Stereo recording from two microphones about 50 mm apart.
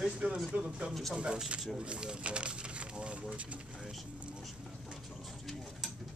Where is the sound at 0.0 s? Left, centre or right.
Centre.